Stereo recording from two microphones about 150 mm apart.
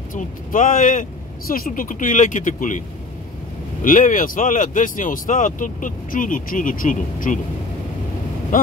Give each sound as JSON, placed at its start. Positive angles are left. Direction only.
{"t": 0.1, "sound": "speech", "side_deg": 60}
{"t": 3.8, "sound": "speech", "side_deg": 60}